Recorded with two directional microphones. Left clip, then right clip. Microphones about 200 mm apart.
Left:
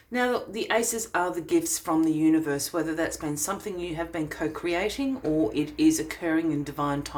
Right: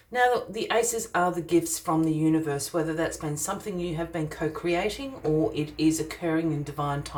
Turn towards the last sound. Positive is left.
turn(degrees=35)  # may be behind; listen again after turning